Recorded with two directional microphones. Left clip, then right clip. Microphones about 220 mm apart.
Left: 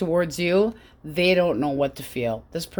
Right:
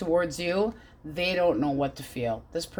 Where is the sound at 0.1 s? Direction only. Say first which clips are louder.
Left 3 dB; 50° left (ahead or behind).